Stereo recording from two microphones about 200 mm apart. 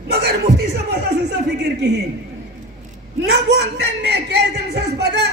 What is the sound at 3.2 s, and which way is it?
Speech, 55° right (ahead or behind).